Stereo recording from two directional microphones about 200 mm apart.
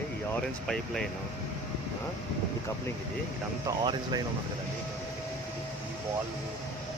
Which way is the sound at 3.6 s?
20° right (ahead or behind).